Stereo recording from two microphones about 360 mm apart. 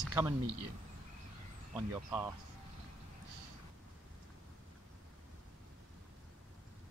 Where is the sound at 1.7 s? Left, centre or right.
Centre.